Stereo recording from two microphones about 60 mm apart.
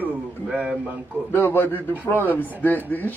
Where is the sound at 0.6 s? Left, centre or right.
Right.